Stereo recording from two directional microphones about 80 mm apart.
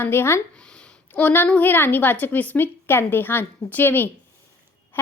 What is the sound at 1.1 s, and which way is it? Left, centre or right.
A woman's voice, left.